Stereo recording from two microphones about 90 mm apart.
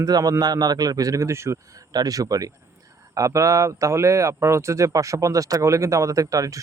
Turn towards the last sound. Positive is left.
turn(degrees=-40)  # may be behind; listen again after turning